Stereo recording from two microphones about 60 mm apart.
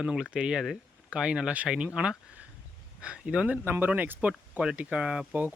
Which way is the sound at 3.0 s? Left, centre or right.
Centre.